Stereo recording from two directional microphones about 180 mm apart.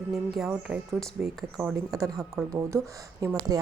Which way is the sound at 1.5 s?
15° right (ahead or behind).